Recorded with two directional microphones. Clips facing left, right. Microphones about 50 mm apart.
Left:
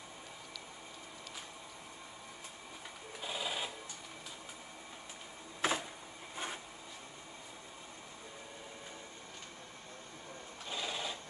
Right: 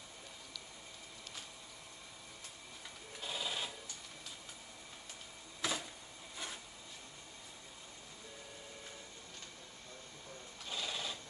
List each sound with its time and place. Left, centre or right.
3.2 s sewing machine: centre
5.6 s a sound: left
10.7 s sewing machine: centre